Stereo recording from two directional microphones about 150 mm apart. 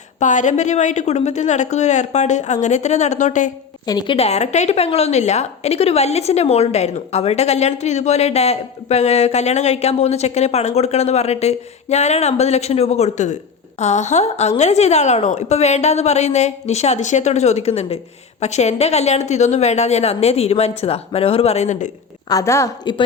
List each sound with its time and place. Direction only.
0.2 s a woman's voice: 55° left (ahead or behind)
3.8 s a woman's voice: 30° left (ahead or behind); by 21.8 s 50° left (ahead or behind)
22.3 s a woman's voice: 20° left (ahead or behind)